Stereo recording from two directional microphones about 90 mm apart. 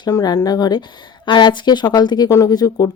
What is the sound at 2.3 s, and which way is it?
Speech, 40° left (ahead or behind).